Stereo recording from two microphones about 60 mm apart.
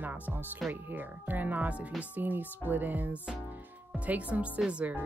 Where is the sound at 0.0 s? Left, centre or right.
Right.